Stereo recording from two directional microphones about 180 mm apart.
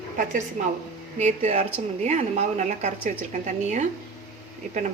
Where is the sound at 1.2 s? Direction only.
40° right (ahead or behind).